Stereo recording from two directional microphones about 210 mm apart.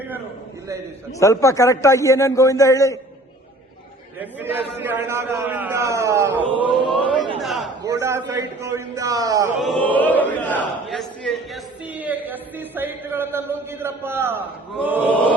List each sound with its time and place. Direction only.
1.2 s a man's voice: 15° left (ahead or behind)
4.2 s a man's voice: 10° right (ahead or behind)
6.5 s a man's voice: 25° right (ahead or behind)
7.3 s a sound: centre (ahead or behind)
7.9 s a man's voice: 15° right (ahead or behind)
9.6 s a sound: 5° left (ahead or behind)
14.8 s a man's voice: 10° right (ahead or behind)